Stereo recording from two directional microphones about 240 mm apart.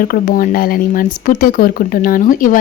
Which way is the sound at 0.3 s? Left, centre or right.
Left.